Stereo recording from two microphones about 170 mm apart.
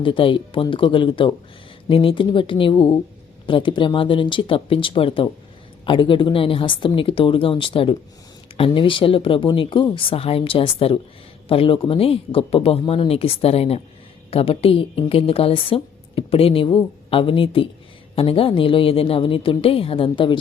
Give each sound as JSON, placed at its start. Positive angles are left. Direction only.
{"t": 0.0, "sound": "a woman's voice", "side_deg": 30}